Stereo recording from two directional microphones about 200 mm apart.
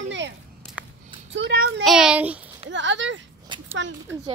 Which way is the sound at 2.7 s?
65° right (ahead or behind).